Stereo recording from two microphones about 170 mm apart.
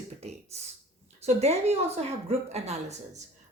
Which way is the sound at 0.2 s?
40° right (ahead or behind).